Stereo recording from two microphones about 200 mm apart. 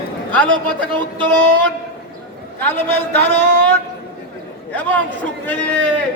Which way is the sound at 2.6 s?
10° left (ahead or behind).